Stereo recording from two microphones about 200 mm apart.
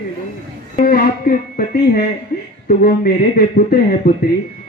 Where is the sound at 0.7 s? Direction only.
45° left (ahead or behind).